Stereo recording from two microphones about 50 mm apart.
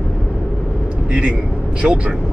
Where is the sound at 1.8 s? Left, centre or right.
Centre.